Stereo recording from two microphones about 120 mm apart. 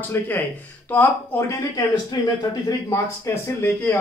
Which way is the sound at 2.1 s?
35° left (ahead or behind).